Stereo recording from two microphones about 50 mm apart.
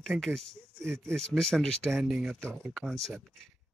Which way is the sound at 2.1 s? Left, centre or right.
Centre.